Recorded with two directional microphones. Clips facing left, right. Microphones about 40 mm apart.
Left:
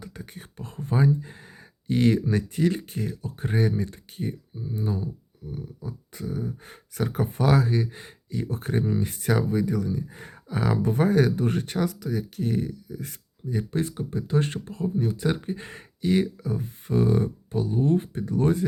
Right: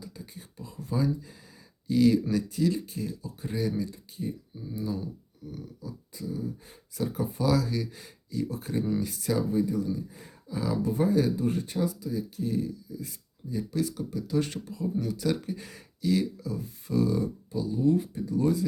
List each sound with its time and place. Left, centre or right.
0.0 s a sound: left
0.9 s speech: left
5.4 s a sound: left
5.8 s speech: left
13.8 s speech: left
14.8 s speech: left